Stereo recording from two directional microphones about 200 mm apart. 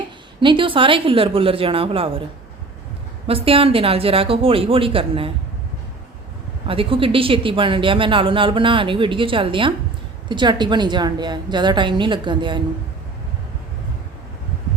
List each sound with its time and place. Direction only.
0.3 s speech: 25° right (ahead or behind)
3.2 s speech: 30° right (ahead or behind)
6.7 s speech: 25° right (ahead or behind)